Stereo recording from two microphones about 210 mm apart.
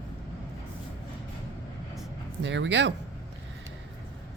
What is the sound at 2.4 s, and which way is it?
Speech, 60° right (ahead or behind).